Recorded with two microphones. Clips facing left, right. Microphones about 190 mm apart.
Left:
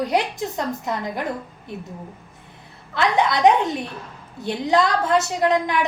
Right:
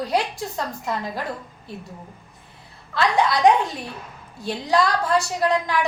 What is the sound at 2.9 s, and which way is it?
A woman's voice, 20° left (ahead or behind).